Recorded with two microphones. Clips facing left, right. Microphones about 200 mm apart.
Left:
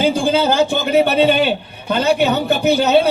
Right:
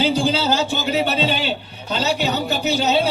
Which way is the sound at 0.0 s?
50° left (ahead or behind).